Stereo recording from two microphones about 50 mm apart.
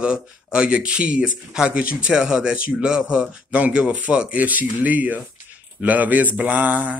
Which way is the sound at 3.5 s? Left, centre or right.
Right.